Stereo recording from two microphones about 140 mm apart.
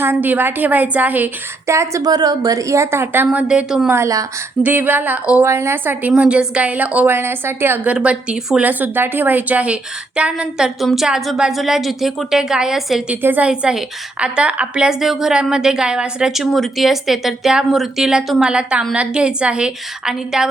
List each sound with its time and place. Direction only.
0.0 s a woman's voice: 15° right (ahead or behind)
3.9 s a woman's voice: 20° right (ahead or behind); by 20.5 s 5° right (ahead or behind)